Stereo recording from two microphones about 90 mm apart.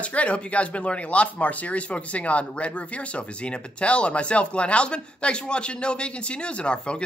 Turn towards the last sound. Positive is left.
turn(degrees=10)  # may be behind; listen again after turning